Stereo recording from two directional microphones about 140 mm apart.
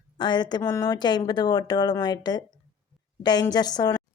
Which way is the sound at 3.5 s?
30° left (ahead or behind).